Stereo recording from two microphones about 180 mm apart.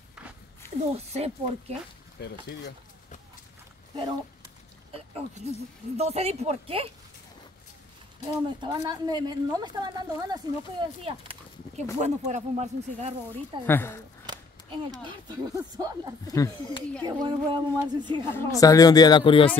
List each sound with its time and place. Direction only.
0.9 s speech: 35° right (ahead or behind)
2.1 s speech: 65° left (ahead or behind)
3.9 s speech: 25° right (ahead or behind)
4.9 s speech: 35° right (ahead or behind)
8.3 s a woman's voice: 25° right (ahead or behind)
11.7 s speech: 40° right (ahead or behind)
13.7 s speech: 15° left (ahead or behind)
15.0 s a woman's voice: 25° right (ahead or behind)
16.3 s speech: 20° left (ahead or behind)
17.0 s a woman's voice: 25° right (ahead or behind)
18.3 s speech: 20° left (ahead or behind)